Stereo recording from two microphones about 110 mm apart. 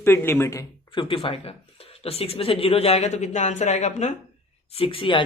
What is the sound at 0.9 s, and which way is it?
Speech, 55° left (ahead or behind).